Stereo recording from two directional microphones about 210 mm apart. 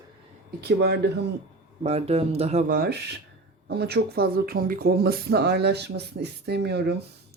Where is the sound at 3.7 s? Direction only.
50° right (ahead or behind).